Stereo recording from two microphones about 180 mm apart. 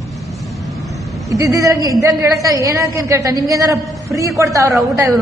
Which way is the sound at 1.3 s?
20° right (ahead or behind).